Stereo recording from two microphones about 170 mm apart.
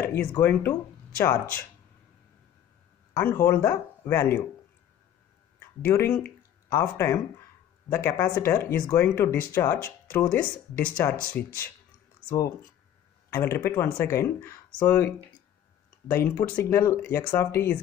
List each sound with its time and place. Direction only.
0.0 s a sound: 15° left (ahead or behind)
0.4 s speech: 10° left (ahead or behind)
3.2 s speech: 15° left (ahead or behind)
5.9 s speech: 10° left (ahead or behind)
16.1 s speech: 15° left (ahead or behind)